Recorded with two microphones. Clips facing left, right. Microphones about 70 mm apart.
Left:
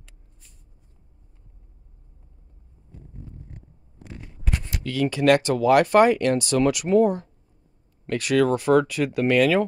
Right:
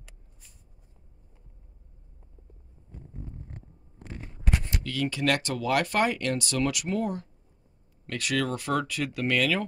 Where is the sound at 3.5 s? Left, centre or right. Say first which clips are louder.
Even; right.